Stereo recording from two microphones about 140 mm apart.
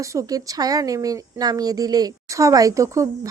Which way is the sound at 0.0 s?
20° right (ahead or behind).